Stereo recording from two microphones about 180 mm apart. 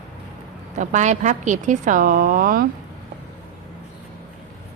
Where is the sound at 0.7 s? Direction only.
45° right (ahead or behind).